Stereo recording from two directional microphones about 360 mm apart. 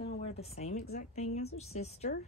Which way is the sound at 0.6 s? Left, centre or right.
Centre.